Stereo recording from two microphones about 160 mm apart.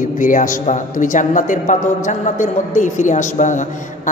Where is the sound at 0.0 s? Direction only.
55° left (ahead or behind).